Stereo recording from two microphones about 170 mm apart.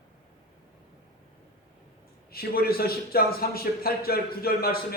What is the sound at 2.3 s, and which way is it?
A man's voice, 65° left (ahead or behind).